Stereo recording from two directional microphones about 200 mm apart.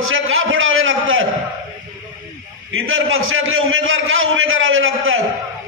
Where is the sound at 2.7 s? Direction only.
85° right.